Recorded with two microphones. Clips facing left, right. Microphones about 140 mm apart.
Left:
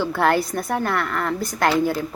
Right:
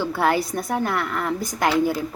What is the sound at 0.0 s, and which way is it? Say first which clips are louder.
A woman's voice: left 2 dB; 15° right (ahead or behind).